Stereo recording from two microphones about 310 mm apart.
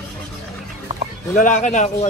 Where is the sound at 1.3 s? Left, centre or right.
Left.